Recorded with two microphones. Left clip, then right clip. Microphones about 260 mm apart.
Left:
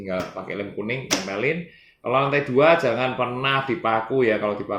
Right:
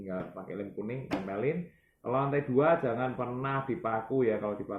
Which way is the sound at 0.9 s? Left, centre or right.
Centre.